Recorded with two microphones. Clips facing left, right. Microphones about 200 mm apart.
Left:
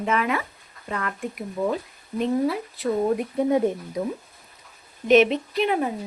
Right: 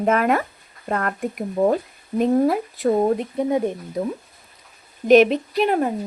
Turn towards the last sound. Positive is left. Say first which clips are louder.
# right 3 dB
turn(degrees=-45)  # may be behind; listen again after turning